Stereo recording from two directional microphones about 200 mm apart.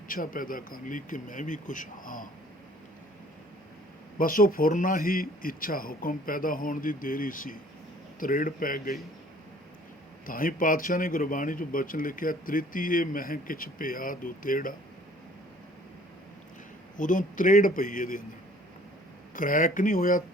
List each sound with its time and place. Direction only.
0.1 s speech: 45° left (ahead or behind)
4.2 s speech: 45° left (ahead or behind)
10.2 s speech: 45° left (ahead or behind)
17.0 s speech: 40° left (ahead or behind)
19.3 s speech: 40° left (ahead or behind)